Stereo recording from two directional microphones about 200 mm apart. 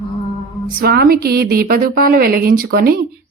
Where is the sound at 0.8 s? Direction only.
50° right (ahead or behind).